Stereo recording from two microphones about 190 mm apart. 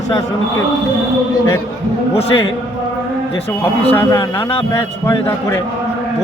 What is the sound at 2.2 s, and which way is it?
Speech, 30° left (ahead or behind).